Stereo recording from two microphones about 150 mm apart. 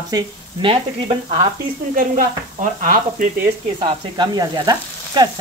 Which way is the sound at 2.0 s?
65° right (ahead or behind).